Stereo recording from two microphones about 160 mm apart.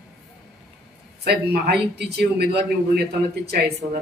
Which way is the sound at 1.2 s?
80° right.